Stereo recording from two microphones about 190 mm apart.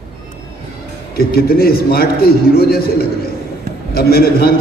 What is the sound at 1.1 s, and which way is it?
A man's voice, 55° left (ahead or behind).